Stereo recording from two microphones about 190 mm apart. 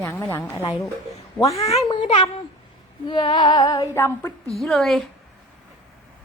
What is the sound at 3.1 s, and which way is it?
Female singing, 25° left (ahead or behind).